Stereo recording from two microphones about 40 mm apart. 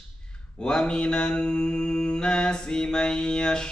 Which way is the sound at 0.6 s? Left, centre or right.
Centre.